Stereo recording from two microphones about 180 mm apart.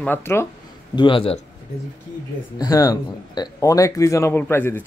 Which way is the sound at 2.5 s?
20° left (ahead or behind).